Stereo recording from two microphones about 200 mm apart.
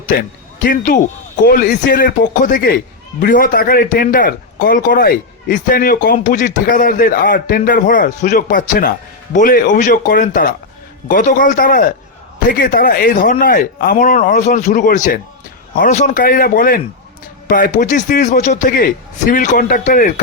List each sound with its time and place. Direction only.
0.1 s speech: 55° left (ahead or behind)